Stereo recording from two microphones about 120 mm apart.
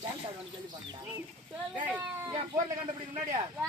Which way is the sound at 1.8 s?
15° right (ahead or behind).